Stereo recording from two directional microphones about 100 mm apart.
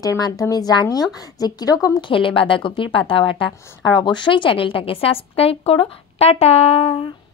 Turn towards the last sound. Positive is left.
turn(degrees=85)